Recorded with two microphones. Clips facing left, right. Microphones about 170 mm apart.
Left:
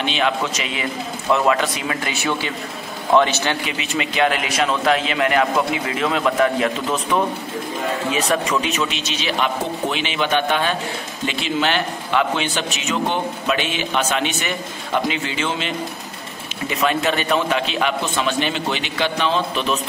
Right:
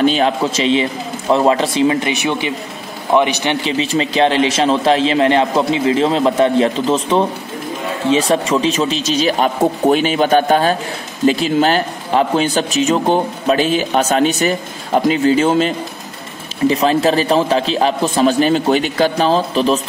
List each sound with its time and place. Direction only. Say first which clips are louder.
0.0 s a man's voice: right 7 dB; 35° right (ahead or behind); by 3.5 s 15° right (ahead or behind)
3.6 s a man's voice: right 7 dB; 30° right (ahead or behind)